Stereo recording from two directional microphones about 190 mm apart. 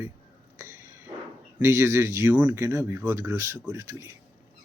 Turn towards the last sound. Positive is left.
turn(degrees=-15)  # may be behind; listen again after turning